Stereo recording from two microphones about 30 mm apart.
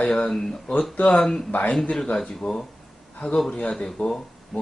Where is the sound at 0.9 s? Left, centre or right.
Left.